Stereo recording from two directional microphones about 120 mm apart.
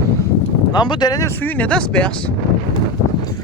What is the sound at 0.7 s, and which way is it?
Speech, 35° left (ahead or behind).